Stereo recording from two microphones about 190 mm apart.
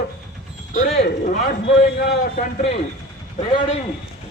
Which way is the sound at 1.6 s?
60° left (ahead or behind).